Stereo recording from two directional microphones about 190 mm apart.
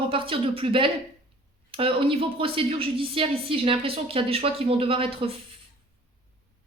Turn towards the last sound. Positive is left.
turn(degrees=-30)  # may be behind; listen again after turning